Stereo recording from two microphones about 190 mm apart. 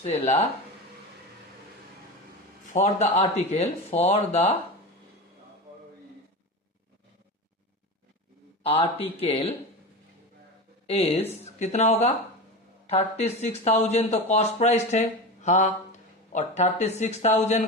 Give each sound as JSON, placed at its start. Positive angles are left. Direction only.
{"t": 0.0, "sound": "speech", "side_deg": 35}
{"t": 2.7, "sound": "speech", "side_deg": 35}
{"t": 8.6, "sound": "speech", "side_deg": 30}
{"t": 10.8, "sound": "speech", "side_deg": 30}